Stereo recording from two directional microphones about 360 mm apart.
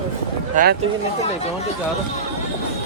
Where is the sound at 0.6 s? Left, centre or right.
Right.